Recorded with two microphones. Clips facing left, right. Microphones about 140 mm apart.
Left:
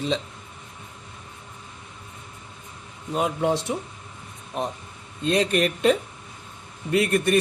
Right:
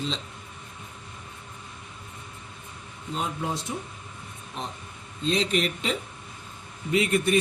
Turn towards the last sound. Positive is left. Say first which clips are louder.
# left 2 dB
turn(degrees=70)  # may be behind; listen again after turning